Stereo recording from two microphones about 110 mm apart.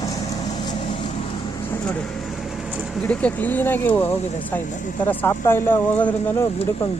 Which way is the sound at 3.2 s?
15° left (ahead or behind).